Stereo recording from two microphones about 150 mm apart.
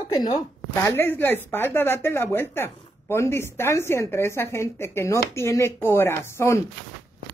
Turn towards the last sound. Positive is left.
turn(degrees=15)  # may be behind; listen again after turning